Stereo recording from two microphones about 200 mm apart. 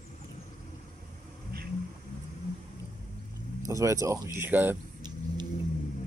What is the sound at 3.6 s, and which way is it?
Speech, 15° right (ahead or behind).